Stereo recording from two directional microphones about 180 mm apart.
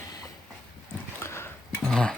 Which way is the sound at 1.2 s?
15° left (ahead or behind).